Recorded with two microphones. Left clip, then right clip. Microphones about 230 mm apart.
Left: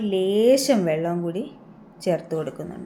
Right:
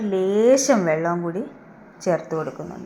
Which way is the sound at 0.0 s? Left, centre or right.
Right.